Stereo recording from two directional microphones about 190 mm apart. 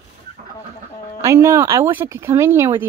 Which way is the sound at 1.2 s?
15° right (ahead or behind).